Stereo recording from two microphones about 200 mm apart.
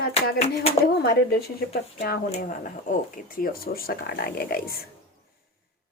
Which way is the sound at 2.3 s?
40° left (ahead or behind).